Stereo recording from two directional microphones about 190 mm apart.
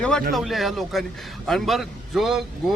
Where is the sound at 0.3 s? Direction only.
Centre (ahead or behind).